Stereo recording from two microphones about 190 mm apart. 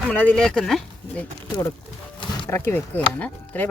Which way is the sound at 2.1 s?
25° left (ahead or behind).